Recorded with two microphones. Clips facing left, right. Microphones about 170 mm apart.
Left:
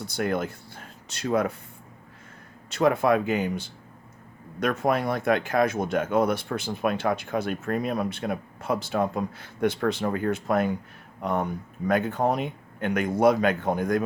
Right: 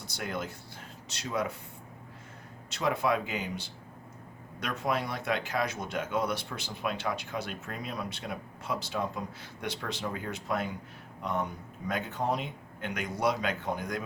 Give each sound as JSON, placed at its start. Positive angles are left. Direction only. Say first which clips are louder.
{"t": 0.1, "sound": "speech", "louder": "left 9 dB", "side_deg": 55}
{"t": 2.6, "sound": "speech", "louder": "left 8 dB", "side_deg": 55}